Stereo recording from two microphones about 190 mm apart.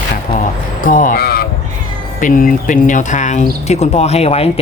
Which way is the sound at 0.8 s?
45° left (ahead or behind).